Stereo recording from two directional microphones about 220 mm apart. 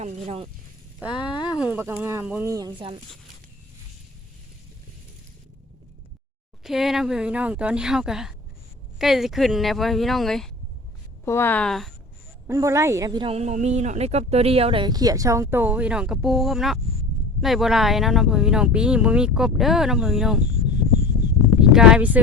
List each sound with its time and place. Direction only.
0.0 s speech: 25° right (ahead or behind)
1.1 s speech: 20° left (ahead or behind)
1.5 s a woman's voice: 5° right (ahead or behind); by 3.0 s 20° right (ahead or behind)
6.6 s speech: centre (ahead or behind)
12.5 s a woman's voice: 15° right (ahead or behind)
21.6 s speech: 5° right (ahead or behind)